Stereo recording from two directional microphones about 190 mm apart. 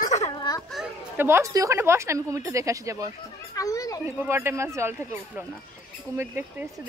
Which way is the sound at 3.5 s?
20° left (ahead or behind).